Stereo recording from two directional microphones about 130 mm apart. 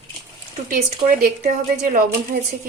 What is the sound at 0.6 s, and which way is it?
A woman's voice, 90° right.